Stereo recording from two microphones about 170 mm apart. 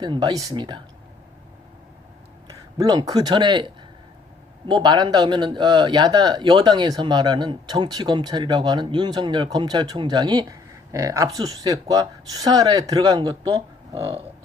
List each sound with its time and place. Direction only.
0.0 s a man's voice: 25° right (ahead or behind)
2.7 s a man's voice: 25° right (ahead or behind)